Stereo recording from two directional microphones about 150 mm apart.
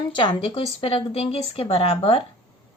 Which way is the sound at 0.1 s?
30° left (ahead or behind).